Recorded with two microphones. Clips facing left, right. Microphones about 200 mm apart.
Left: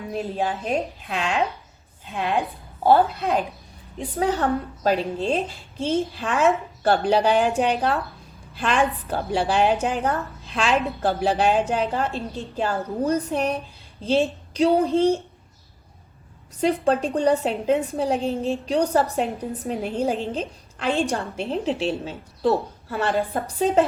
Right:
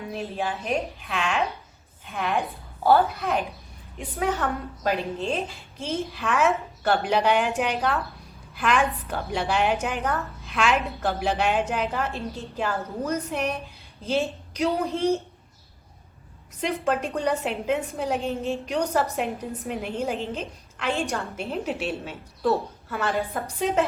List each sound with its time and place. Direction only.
0.1 s a woman's voice: 35° left (ahead or behind)
16.6 s a woman's voice: 30° left (ahead or behind)